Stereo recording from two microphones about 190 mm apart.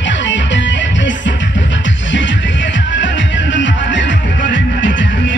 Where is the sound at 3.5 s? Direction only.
75° left (ahead or behind).